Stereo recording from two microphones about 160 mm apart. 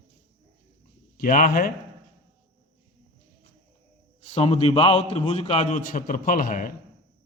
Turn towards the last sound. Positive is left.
turn(degrees=60)  # may be behind; listen again after turning